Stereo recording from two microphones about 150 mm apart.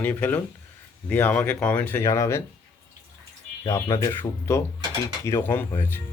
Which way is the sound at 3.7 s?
20° left (ahead or behind).